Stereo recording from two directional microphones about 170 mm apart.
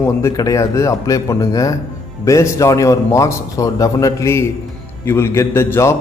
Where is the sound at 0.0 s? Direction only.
15° left (ahead or behind).